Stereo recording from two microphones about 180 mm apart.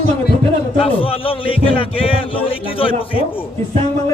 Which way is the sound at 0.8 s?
30° left (ahead or behind).